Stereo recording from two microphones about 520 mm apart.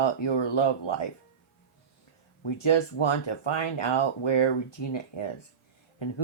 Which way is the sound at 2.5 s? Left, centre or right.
Left.